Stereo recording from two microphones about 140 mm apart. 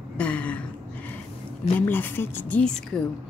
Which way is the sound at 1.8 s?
15° left (ahead or behind).